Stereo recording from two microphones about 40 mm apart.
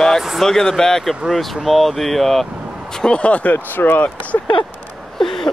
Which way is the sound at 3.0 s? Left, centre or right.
Left.